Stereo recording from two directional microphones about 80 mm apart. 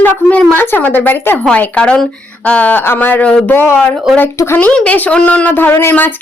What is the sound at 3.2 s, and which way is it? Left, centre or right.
Speech, centre.